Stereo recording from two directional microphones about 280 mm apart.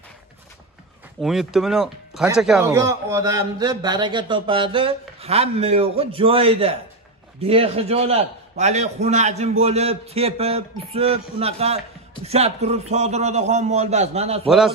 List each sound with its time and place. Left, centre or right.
1.2 s a man's voice: centre; by 14.5 s right